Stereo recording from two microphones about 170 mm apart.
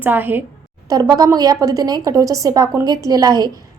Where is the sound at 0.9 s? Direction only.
20° right (ahead or behind).